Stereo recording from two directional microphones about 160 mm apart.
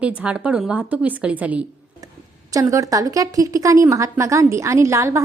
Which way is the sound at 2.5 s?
20° right (ahead or behind).